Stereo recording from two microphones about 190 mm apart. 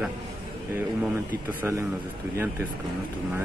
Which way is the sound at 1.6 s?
15° right (ahead or behind).